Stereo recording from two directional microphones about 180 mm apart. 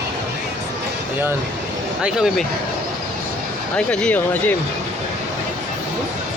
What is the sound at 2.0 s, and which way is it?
Speech, 5° right (ahead or behind).